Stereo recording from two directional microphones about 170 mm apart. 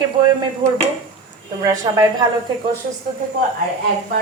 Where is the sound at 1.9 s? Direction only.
20° right (ahead or behind).